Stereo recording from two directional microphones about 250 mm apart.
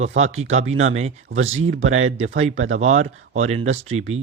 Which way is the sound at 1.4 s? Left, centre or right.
Right.